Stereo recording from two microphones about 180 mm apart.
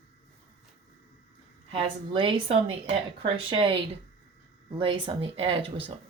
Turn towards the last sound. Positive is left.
turn(degrees=-30)  # may be behind; listen again after turning